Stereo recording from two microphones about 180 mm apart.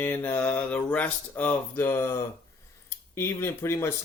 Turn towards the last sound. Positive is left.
turn(degrees=15)  # may be behind; listen again after turning